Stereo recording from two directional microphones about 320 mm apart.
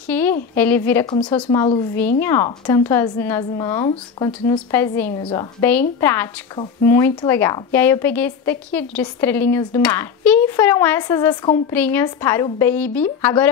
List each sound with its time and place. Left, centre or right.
0.1 s speech: centre